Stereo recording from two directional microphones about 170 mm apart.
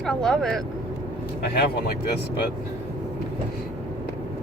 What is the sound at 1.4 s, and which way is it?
Speech, 65° left (ahead or behind).